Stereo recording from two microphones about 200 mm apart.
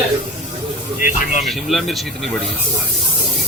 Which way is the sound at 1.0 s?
45° left (ahead or behind).